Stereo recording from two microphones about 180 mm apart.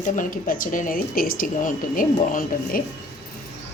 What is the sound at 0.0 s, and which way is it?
Speech, 45° left (ahead or behind).